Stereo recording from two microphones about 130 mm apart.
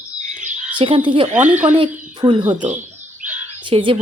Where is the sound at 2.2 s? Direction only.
35° right (ahead or behind).